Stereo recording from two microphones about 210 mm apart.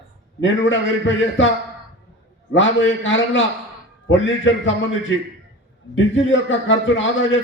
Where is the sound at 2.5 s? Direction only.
65° left (ahead or behind).